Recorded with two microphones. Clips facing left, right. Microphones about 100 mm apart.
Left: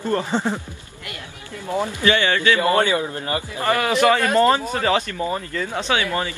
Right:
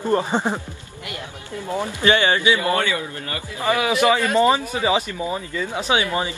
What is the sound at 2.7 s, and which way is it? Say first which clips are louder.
Speech: left 4 dB; 30° left (ahead or behind).